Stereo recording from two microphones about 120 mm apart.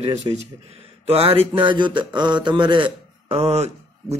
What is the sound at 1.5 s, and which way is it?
A man's voice, 40° right (ahead or behind).